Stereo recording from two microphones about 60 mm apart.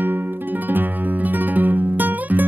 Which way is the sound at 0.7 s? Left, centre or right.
Right.